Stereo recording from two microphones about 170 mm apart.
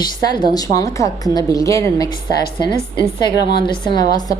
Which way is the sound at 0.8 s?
20° left (ahead or behind).